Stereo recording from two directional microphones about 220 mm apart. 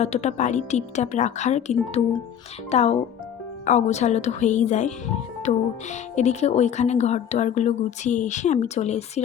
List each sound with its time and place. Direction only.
0.0 s speech: 30° left (ahead or behind)